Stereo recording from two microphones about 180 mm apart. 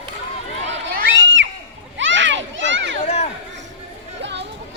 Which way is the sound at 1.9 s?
90° right.